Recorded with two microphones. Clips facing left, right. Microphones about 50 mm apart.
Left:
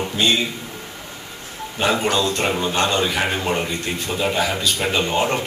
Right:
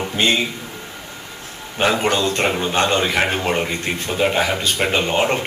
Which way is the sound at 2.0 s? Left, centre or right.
Right.